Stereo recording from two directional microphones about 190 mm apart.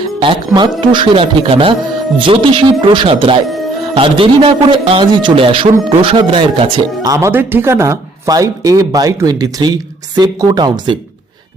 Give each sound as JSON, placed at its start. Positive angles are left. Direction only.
{"t": 0.2, "sound": "speech", "side_deg": -25}